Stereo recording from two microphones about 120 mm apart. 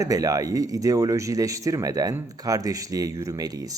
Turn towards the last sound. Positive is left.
turn(degrees=-30)  # may be behind; listen again after turning